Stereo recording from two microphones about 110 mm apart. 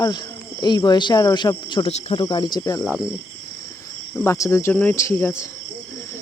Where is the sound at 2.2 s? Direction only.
40° left (ahead or behind).